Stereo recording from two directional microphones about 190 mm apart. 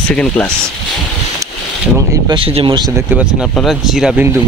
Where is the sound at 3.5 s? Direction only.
Centre (ahead or behind).